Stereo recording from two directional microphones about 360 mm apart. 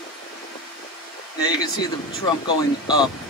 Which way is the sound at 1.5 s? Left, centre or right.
Centre.